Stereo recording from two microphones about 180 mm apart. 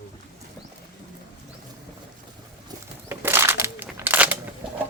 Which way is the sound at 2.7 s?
20° right (ahead or behind).